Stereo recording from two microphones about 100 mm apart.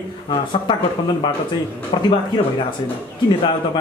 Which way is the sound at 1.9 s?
60° left (ahead or behind).